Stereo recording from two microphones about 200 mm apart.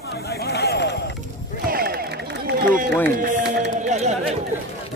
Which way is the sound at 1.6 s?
50° right (ahead or behind).